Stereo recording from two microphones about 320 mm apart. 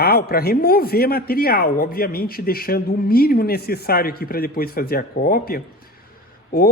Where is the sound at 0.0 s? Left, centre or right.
Left.